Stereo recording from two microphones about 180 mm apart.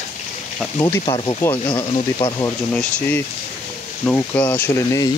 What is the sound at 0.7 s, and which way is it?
Speech, 15° left (ahead or behind).